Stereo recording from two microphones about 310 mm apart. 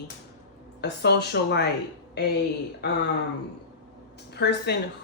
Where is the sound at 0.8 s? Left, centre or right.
Left.